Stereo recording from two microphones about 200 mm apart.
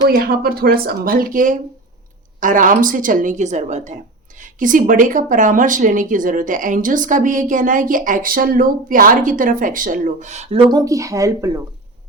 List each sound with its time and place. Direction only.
0.1 s a woman's voice: 50° right (ahead or behind); by 10.6 s 35° right (ahead or behind)
10.7 s speech: 20° right (ahead or behind)